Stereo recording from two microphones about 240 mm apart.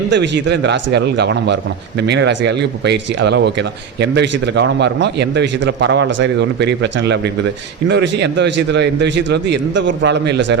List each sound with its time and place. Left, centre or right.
0.1 s speech: right